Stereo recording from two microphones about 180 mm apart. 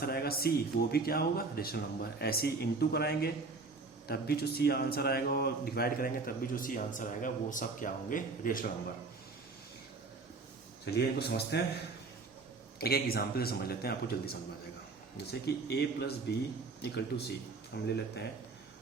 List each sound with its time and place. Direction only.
0.0 s speech: 60° left (ahead or behind)
10.9 s speech: 65° left (ahead or behind)
12.8 s speech: 60° left (ahead or behind)